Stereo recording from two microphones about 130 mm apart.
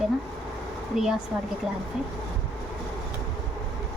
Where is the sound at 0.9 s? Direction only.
5° right (ahead or behind).